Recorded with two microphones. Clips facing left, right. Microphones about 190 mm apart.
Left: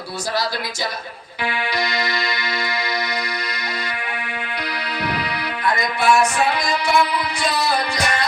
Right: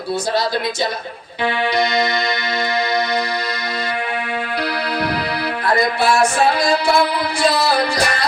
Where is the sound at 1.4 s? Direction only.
25° right (ahead or behind).